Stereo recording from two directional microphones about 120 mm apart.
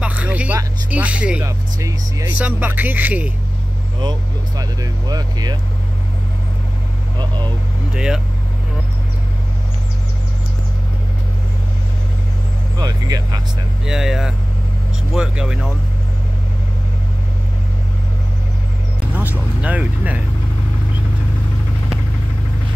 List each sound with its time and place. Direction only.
0.0 s vehicle: 10° right (ahead or behind)
0.8 s speech: 10° right (ahead or behind)
1.4 s speech: 25° right (ahead or behind)
2.3 s speech: 10° right (ahead or behind)
4.0 s speech: 35° right (ahead or behind)
7.2 s speech: 40° right (ahead or behind)
7.9 s speech: 5° right (ahead or behind)
12.7 s speech: 35° right (ahead or behind)
13.8 s speech: 5° right (ahead or behind)
19.1 s speech: 15° right (ahead or behind)